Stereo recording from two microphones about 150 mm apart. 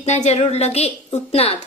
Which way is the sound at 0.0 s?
50° left (ahead or behind).